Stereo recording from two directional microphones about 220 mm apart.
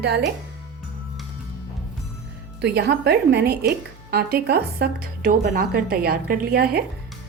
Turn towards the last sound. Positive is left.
turn(degrees=-45)  # may be behind; listen again after turning